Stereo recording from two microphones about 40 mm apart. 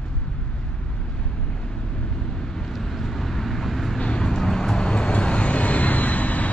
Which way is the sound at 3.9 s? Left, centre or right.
Left.